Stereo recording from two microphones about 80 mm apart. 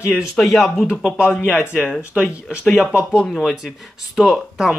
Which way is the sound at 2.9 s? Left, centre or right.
Centre.